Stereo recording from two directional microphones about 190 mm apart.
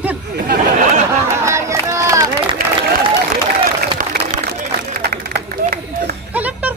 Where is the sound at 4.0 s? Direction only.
45° right (ahead or behind).